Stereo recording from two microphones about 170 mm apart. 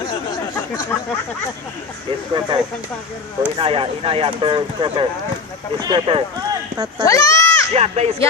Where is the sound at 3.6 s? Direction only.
30° right (ahead or behind).